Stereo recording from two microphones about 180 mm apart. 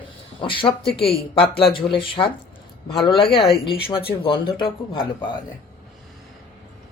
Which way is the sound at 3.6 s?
30° left (ahead or behind).